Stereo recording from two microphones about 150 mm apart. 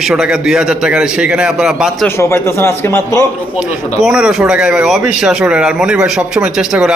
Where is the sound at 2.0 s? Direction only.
15° left (ahead or behind).